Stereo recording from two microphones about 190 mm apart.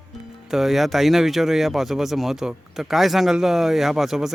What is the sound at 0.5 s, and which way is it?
Speech, centre (ahead or behind).